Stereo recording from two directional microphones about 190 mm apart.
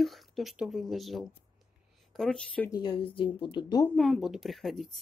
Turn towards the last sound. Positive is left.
turn(degrees=0)  # may be behind; listen again after turning